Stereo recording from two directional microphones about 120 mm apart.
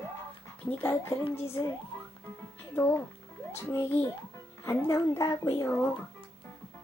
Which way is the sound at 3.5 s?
20° left (ahead or behind).